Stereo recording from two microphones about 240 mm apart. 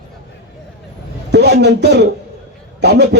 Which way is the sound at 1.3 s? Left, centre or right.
Right.